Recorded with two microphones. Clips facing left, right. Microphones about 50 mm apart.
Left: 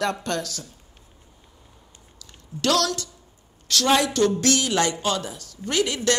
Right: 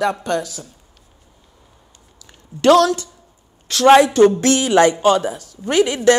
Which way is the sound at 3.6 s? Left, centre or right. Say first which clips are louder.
Right 10 dB; right.